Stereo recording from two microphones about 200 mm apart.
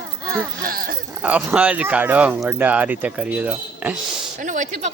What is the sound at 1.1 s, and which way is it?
Speech, 5° right (ahead or behind).